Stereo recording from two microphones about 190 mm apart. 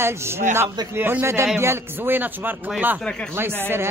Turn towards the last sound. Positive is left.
turn(degrees=-10)  # may be behind; listen again after turning